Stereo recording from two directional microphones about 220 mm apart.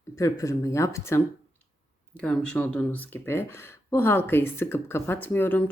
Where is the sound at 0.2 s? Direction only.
15° left (ahead or behind).